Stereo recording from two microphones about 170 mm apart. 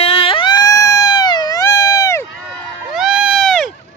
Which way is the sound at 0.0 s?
30° left (ahead or behind).